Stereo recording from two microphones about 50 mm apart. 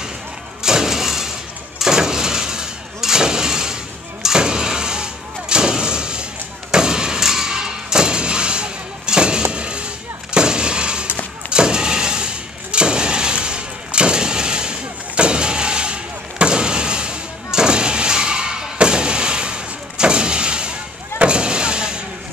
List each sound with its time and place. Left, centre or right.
0.7 s thump: centre
1.8 s vehicle: centre
4.2 s artillery fire: centre
6.7 s a sound: centre
10.3 s artillery fire: centre
11.5 s vehicle: centre
12.7 s a sound: centre
21.2 s vehicle: centre